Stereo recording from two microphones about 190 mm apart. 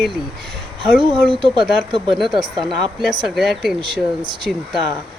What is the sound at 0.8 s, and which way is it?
Speech, 25° right (ahead or behind).